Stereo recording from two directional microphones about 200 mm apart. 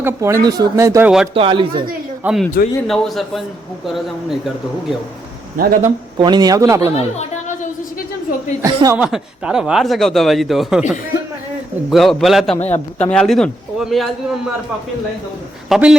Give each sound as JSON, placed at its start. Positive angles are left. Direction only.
{"t": 0.0, "sound": "speech", "side_deg": -15}
{"t": 1.3, "sound": "a man's voice", "side_deg": -25}
{"t": 2.2, "sound": "speech", "side_deg": 0}
{"t": 5.5, "sound": "speech", "side_deg": -45}
{"t": 6.1, "sound": "speech", "side_deg": -20}
{"t": 6.9, "sound": "a sound", "side_deg": 35}
{"t": 8.6, "sound": "speech", "side_deg": -15}
{"t": 9.0, "sound": "speech", "side_deg": -5}
{"t": 11.9, "sound": "speech", "side_deg": 0}
{"t": 12.5, "sound": "a man's voice", "side_deg": 30}
{"t": 13.1, "sound": "speech", "side_deg": 5}
{"t": 15.7, "sound": "speech", "side_deg": -5}